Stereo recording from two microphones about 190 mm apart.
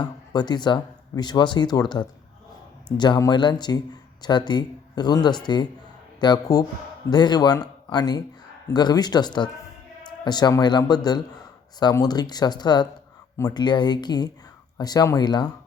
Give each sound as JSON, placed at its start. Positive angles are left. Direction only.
{"t": 0.0, "sound": "speech", "side_deg": 20}